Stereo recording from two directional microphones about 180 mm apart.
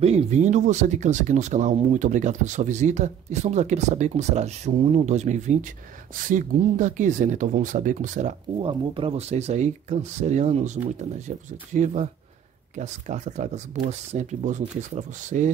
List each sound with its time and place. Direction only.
0.0 s speech: 40° right (ahead or behind)
8.5 s speech: 30° right (ahead or behind)